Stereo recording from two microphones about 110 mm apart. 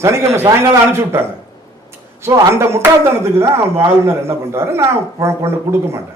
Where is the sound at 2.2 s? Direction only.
25° right (ahead or behind).